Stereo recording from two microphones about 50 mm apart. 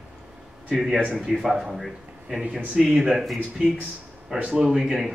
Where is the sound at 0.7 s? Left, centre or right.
Centre.